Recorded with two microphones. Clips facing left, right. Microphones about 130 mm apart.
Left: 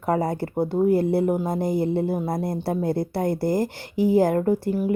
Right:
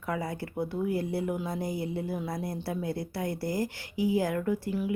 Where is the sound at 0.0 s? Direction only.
45° left (ahead or behind).